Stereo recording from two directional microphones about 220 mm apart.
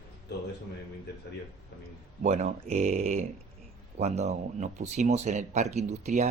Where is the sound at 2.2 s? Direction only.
30° right (ahead or behind).